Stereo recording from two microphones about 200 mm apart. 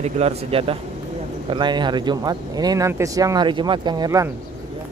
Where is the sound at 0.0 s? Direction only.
30° right (ahead or behind).